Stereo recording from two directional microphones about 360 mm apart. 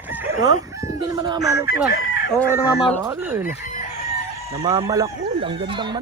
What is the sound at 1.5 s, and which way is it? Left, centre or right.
Chicken, left.